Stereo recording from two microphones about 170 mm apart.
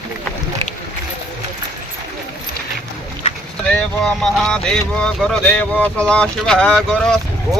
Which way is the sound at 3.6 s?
5° left (ahead or behind).